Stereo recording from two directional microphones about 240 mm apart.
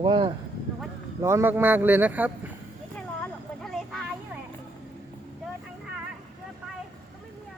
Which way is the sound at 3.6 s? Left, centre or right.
Centre.